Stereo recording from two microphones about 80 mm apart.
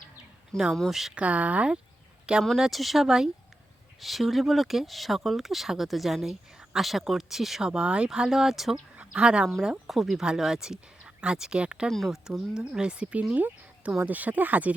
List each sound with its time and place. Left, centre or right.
0.7 s speech: centre
1.1 s speech: centre
2.4 s speech: centre
9.0 s speech: centre
11.9 s speech: centre
12.2 s speech: centre